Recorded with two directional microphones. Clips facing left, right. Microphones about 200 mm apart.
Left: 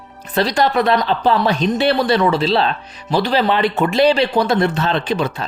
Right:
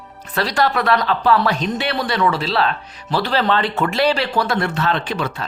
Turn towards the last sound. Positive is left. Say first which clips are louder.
# left 4 dB
turn(degrees=20)  # may be behind; listen again after turning